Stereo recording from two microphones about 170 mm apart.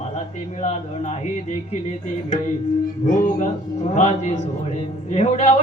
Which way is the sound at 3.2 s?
45° left (ahead or behind).